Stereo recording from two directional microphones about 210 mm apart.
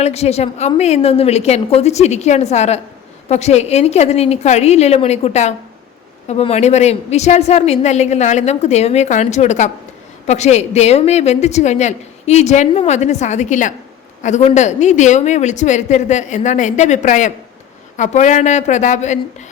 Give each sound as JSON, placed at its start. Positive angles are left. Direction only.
{"t": 0.0, "sound": "a woman's voice", "side_deg": 30}